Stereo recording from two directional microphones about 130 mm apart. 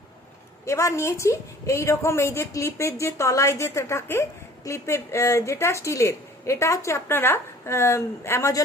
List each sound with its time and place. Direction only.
0.6 s a woman's voice: 20° left (ahead or behind)